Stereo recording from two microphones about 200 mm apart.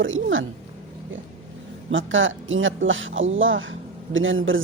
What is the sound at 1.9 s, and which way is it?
Speech, 70° right (ahead or behind).